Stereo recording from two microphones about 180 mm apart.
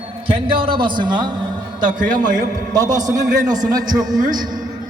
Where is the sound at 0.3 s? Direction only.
30° right (ahead or behind).